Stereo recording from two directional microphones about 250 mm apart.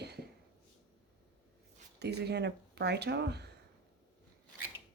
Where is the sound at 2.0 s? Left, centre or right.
Right.